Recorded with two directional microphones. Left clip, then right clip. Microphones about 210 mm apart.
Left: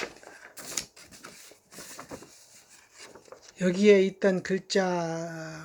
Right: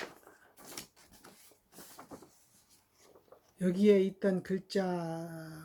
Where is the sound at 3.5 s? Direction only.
20° right (ahead or behind).